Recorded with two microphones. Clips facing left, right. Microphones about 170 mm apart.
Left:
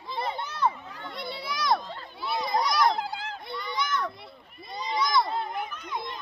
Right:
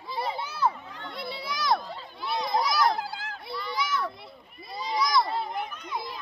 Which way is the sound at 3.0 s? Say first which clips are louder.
Left 2 dB; 20° left (ahead or behind).